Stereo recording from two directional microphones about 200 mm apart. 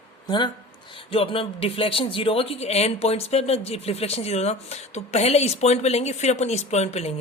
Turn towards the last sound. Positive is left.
turn(degrees=30)  # may be behind; listen again after turning